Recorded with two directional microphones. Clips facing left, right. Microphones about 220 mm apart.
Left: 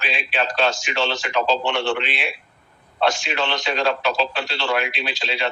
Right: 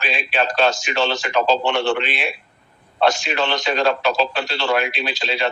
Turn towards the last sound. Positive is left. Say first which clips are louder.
# right 3 dB
turn(degrees=-45)  # may be behind; listen again after turning